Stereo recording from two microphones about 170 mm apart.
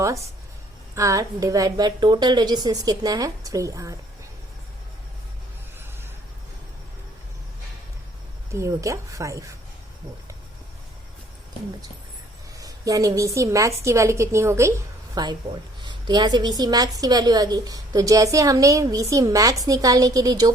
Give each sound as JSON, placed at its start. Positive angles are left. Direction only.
{"t": 0.9, "sound": "a woman's voice", "side_deg": -20}
{"t": 8.5, "sound": "a woman's voice", "side_deg": -15}
{"t": 12.5, "sound": "a woman's voice", "side_deg": -20}